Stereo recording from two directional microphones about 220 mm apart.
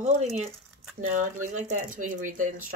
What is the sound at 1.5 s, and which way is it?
Speech, 35° right (ahead or behind).